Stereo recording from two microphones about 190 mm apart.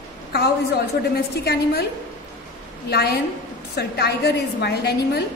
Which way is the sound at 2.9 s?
60° left (ahead or behind).